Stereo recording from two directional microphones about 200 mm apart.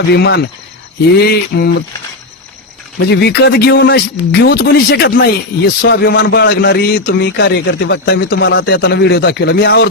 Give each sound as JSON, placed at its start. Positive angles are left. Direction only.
{"t": 0.1, "sound": "speech", "side_deg": 55}
{"t": 3.1, "sound": "speech", "side_deg": 55}